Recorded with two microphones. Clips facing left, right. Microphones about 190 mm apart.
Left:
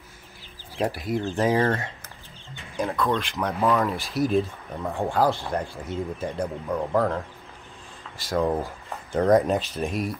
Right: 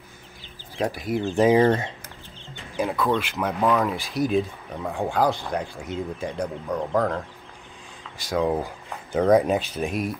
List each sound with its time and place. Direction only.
0.7 s speech: centre (ahead or behind)
1.3 s speech: 15° right (ahead or behind)
3.0 s speech: 5° right (ahead or behind)